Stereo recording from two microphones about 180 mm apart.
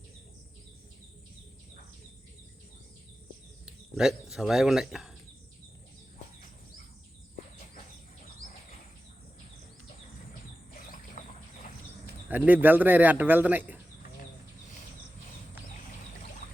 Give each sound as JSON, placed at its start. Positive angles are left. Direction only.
{"t": 3.7, "sound": "speech", "side_deg": -5}
{"t": 11.2, "sound": "a sound", "side_deg": 45}
{"t": 12.5, "sound": "speech", "side_deg": -10}